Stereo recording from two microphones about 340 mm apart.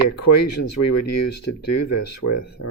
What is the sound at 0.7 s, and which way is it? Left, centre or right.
Speech, left.